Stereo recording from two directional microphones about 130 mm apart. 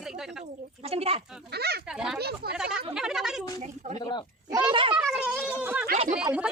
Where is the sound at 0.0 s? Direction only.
5° right (ahead or behind).